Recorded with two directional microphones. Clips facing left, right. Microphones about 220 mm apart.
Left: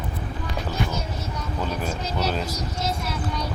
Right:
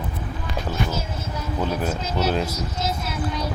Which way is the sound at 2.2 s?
10° right (ahead or behind).